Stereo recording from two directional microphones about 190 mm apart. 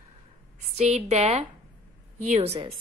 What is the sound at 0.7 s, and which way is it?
A woman's voice, 35° right (ahead or behind).